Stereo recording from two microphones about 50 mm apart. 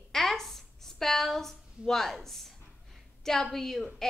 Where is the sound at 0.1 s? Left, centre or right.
Centre.